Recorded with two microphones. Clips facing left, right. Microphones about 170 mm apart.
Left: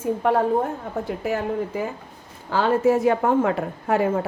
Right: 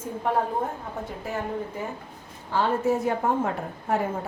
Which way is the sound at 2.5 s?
90° left.